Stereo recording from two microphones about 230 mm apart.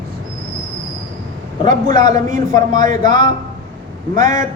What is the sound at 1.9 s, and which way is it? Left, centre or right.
A man's voice, centre.